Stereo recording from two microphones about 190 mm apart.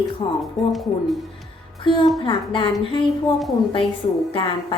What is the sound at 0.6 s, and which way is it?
Speech, centre (ahead or behind).